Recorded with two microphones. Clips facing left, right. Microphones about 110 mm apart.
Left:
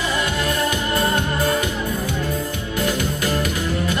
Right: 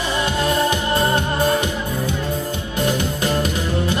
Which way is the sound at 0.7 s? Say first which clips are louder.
Right 2 dB; 25° right (ahead or behind).